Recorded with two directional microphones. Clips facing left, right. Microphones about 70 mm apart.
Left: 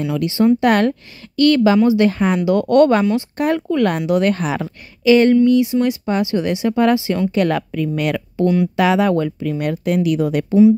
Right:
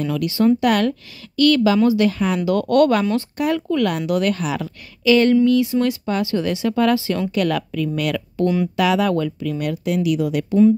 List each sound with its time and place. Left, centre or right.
0.0 s a woman's voice: left
2.4 s a woman's voice: left
3.3 s a woman's voice: left